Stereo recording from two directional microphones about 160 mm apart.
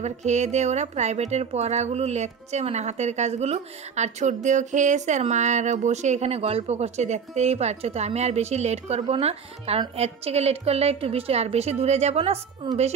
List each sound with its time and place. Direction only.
0.0 s a woman's voice: 45° right (ahead or behind)